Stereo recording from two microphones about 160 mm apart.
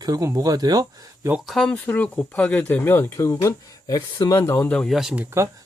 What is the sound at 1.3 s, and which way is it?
Speech, centre (ahead or behind).